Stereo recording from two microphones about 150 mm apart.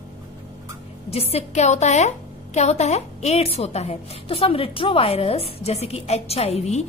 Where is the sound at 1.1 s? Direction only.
40° left (ahead or behind).